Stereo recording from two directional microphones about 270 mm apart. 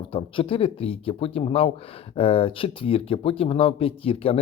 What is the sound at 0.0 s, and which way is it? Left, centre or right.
Speech, centre.